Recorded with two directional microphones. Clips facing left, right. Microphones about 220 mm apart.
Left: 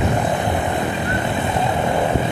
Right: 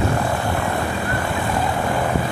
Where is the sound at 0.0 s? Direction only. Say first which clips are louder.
Left 1 dB; 20° left (ahead or behind).